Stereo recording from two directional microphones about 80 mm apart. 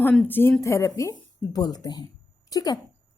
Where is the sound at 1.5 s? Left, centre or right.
Left.